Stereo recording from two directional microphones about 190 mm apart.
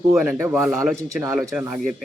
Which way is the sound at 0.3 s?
15° right (ahead or behind).